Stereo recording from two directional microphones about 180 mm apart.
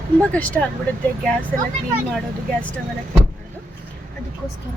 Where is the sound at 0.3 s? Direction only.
10° left (ahead or behind).